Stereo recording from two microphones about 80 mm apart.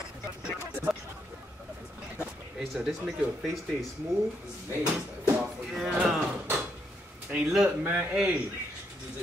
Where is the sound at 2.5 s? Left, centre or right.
Centre.